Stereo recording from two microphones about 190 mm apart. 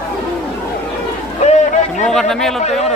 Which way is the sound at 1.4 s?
35° left (ahead or behind).